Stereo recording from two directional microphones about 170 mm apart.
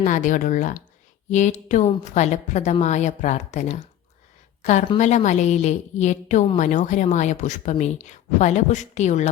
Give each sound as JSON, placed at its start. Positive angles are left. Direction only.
{"t": 0.0, "sound": "speech", "side_deg": 50}